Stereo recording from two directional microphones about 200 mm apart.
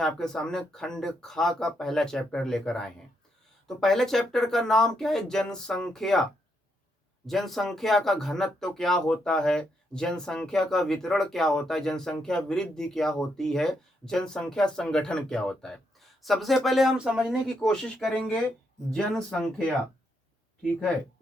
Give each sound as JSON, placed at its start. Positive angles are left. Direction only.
{"t": 0.0, "sound": "speech", "side_deg": 5}
{"t": 7.3, "sound": "speech", "side_deg": 0}